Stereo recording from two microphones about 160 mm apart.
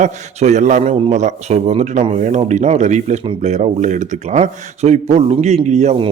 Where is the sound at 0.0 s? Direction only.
50° right (ahead or behind).